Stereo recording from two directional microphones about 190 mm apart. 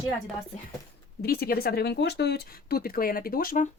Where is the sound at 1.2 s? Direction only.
55° left (ahead or behind).